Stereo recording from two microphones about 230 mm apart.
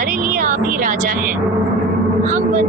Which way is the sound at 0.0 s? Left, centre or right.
Right.